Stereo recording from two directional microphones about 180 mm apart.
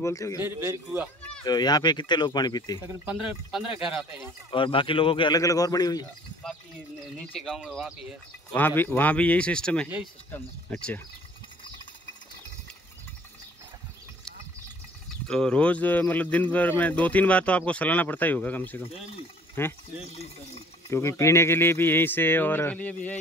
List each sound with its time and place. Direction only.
0.0 s speech: 15° left (ahead or behind)
0.4 s a man's voice: 15° right (ahead or behind)
1.4 s speech: 25° left (ahead or behind)
2.9 s speech: 5° right (ahead or behind)
4.5 s speech: 30° left (ahead or behind)
7.3 s speech: centre (ahead or behind)
8.5 s speech: 10° left (ahead or behind)
15.2 s speech: 5° left (ahead or behind)
20.9 s speech: 15° left (ahead or behind)